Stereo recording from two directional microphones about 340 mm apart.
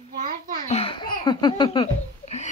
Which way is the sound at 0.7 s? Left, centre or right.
Centre.